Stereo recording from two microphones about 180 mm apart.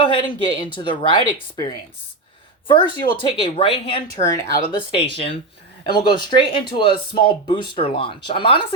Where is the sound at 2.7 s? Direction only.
25° left (ahead or behind).